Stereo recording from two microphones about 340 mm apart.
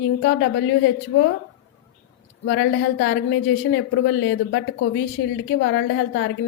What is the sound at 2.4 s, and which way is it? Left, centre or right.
A woman's voice, left.